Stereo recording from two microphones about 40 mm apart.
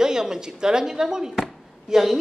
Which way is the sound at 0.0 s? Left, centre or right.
Centre.